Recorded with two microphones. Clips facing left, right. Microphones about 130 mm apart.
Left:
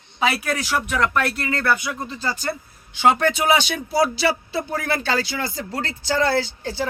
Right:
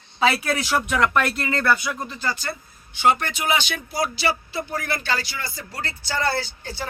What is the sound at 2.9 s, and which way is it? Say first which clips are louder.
Speech: left 3 dB; 90° left.